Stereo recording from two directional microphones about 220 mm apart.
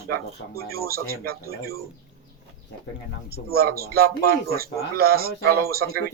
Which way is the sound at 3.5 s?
45° right (ahead or behind).